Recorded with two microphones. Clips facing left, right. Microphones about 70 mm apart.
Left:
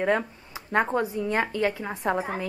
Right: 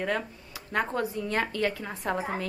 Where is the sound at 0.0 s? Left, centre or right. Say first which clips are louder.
Left 6 dB; left.